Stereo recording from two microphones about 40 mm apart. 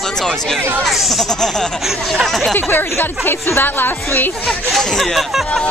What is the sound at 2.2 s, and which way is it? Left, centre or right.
Speech, centre.